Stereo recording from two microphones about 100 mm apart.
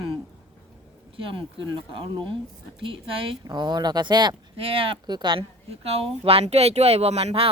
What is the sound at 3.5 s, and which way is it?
Speech, 45° right (ahead or behind).